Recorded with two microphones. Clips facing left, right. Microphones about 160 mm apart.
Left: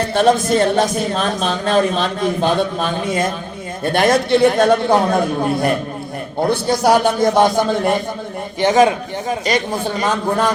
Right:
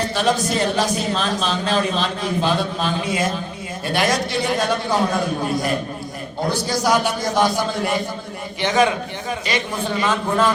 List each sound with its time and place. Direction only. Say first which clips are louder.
0.1 s a man's voice: left 6 dB; 55° left (ahead or behind)
8.6 s a man's voice: left 5 dB; 40° left (ahead or behind)
10.0 s speech: left 1 dB; 45° left (ahead or behind)